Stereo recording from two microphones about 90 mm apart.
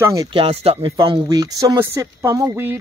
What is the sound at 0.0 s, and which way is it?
Speech, 40° right (ahead or behind).